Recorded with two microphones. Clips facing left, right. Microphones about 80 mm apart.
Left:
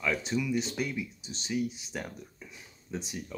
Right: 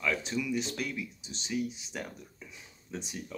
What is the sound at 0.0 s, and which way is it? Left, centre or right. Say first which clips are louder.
Speech: left 2 dB; centre.